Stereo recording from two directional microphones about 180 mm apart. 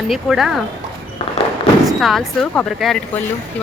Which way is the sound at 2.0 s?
Centre (ahead or behind).